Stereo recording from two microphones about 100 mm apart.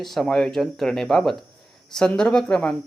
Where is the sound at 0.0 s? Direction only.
Centre (ahead or behind).